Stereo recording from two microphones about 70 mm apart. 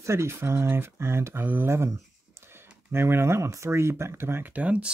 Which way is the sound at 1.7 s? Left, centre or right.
Right.